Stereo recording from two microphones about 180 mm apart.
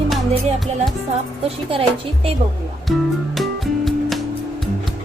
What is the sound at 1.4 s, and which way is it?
Speech, 30° right (ahead or behind).